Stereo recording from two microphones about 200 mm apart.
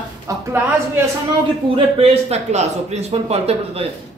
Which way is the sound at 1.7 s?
30° right (ahead or behind).